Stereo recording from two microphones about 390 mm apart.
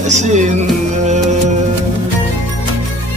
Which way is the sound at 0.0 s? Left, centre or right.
Centre.